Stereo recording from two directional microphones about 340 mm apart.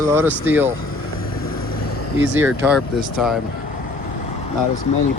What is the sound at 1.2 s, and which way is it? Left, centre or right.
Vehicle, left.